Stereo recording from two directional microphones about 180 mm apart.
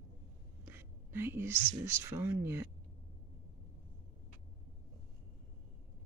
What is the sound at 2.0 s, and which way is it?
Speech, 15° right (ahead or behind).